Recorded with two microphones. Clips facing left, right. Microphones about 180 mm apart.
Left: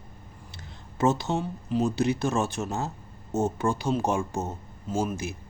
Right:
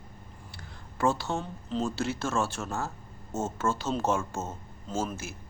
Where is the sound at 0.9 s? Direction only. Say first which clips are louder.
Left 3 dB; 20° left (ahead or behind).